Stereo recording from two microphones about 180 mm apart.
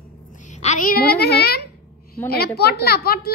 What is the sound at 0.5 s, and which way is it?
A child's voice, 40° left (ahead or behind).